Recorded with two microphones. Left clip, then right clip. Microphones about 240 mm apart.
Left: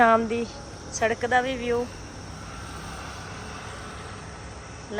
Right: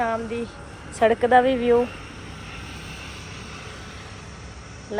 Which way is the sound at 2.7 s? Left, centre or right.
Centre.